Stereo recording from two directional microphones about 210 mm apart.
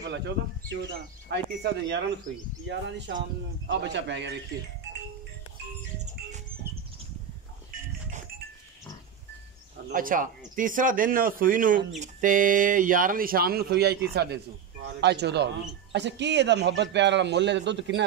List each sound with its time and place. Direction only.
1.3 s a man's voice: 55° right (ahead or behind)
9.8 s a man's voice: 40° right (ahead or behind); by 18.0 s 55° right (ahead or behind)